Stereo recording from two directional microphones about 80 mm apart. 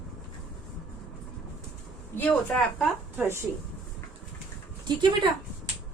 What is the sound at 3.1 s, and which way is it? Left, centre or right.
Speech, right.